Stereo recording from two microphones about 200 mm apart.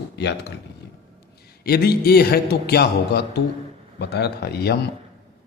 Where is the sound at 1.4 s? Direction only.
50° left (ahead or behind).